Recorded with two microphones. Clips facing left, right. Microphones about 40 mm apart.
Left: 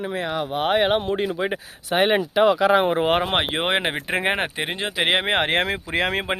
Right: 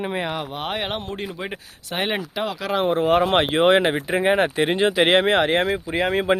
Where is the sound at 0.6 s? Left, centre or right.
Centre.